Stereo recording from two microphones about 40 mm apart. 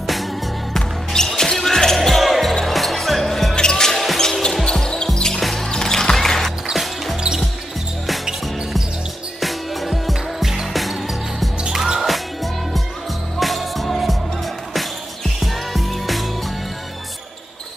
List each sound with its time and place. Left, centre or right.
0.0 s music: centre
0.7 s basketball bounce: centre
3.5 s music: centre
4.6 s basketball bounce: centre
5.4 s music: centre
5.7 s music: centre
6.7 s music: centre
9.4 s music: centre
11.7 s music: centre
13.4 s music: centre
15.4 s music: centre